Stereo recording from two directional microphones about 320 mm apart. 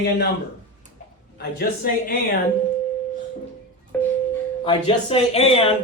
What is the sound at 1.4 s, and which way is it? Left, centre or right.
Speech, left.